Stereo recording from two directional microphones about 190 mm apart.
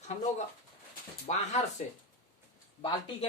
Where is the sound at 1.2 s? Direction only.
35° left (ahead or behind).